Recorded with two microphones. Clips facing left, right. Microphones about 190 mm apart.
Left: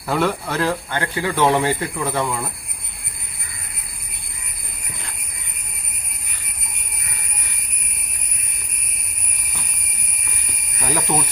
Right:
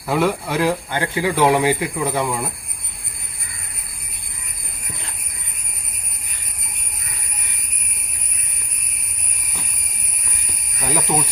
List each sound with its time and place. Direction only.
0.1 s speech: 10° right (ahead or behind)
10.8 s speech: 5° right (ahead or behind)